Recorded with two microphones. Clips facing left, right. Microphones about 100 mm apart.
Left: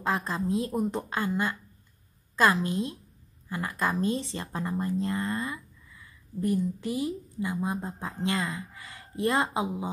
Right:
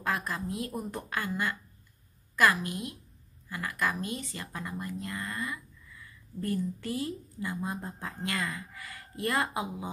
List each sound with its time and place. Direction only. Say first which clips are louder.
0.0 s speech: left 4 dB; 25° left (ahead or behind)